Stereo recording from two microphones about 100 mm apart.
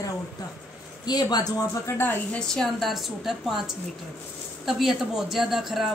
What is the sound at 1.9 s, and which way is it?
Speech, 25° left (ahead or behind).